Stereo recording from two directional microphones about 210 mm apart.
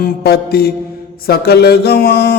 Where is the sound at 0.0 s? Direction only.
50° left (ahead or behind).